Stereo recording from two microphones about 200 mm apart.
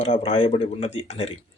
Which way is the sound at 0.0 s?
30° left (ahead or behind).